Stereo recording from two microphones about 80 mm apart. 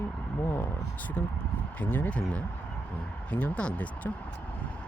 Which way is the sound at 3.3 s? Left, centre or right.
Centre.